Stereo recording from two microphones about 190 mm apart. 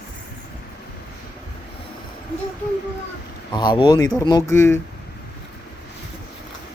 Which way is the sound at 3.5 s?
25° left (ahead or behind).